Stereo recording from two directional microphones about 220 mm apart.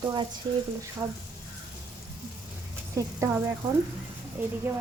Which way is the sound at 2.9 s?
10° right (ahead or behind).